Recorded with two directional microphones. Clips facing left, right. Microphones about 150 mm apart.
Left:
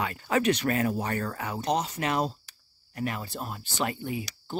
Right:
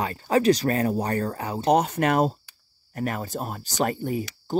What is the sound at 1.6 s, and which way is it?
Speech, 55° right (ahead or behind).